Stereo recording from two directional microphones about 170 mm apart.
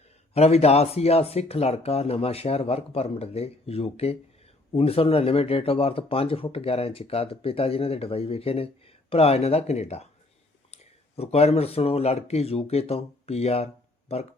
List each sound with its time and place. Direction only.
0.3 s speech: 40° left (ahead or behind)
11.2 s speech: 40° left (ahead or behind)